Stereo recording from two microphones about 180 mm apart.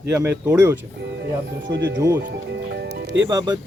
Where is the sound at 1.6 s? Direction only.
75° right (ahead or behind).